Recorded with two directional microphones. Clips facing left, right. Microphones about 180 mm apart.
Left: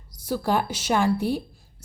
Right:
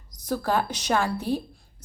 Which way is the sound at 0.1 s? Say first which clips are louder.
Left 1 dB; 10° left (ahead or behind).